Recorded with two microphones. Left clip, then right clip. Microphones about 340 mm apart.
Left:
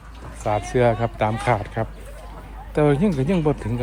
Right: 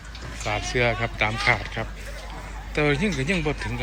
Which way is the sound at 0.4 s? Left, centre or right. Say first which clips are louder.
Left 4 dB; centre.